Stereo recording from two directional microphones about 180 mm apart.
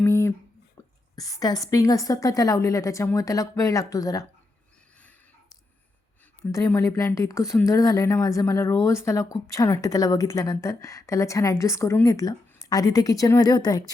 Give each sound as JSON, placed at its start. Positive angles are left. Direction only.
{"t": 0.0, "sound": "a sound", "side_deg": 15}
{"t": 1.1, "sound": "a woman's voice", "side_deg": 20}
{"t": 6.4, "sound": "speech", "side_deg": 15}